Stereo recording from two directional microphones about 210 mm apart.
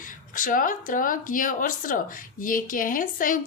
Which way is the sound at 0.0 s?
40° left (ahead or behind).